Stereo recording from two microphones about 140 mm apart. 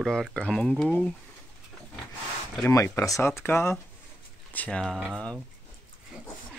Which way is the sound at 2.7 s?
20° left (ahead or behind).